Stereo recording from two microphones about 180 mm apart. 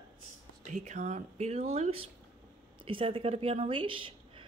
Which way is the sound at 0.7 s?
40° right (ahead or behind).